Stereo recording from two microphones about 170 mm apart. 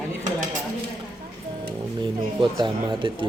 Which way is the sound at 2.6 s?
30° right (ahead or behind).